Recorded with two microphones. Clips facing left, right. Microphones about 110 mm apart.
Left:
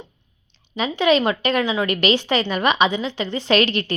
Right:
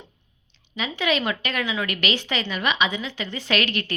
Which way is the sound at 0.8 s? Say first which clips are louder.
Left 7 dB; 30° left (ahead or behind).